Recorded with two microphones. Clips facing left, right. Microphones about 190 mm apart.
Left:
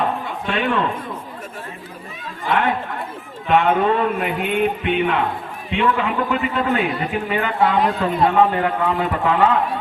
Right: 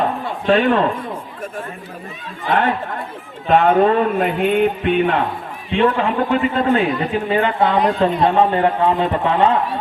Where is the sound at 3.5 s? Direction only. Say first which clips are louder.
Right 3 dB; 40° right (ahead or behind).